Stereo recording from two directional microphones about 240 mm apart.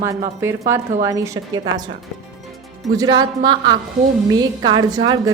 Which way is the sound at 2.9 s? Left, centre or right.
Centre.